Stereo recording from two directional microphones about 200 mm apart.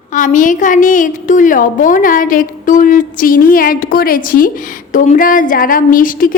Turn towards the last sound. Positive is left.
turn(degrees=45)  # may be behind; listen again after turning